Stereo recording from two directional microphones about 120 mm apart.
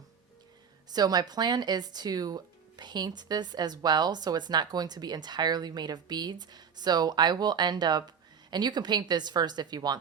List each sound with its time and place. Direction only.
0.9 s speech: 35° right (ahead or behind)